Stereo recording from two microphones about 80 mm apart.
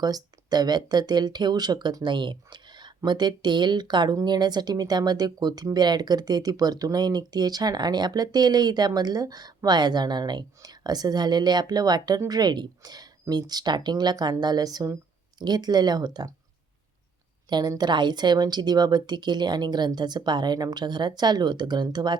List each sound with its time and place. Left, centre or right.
0.0 s speech: right
17.5 s speech: right